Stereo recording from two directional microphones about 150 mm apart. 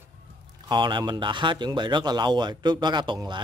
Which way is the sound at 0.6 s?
30° right (ahead or behind).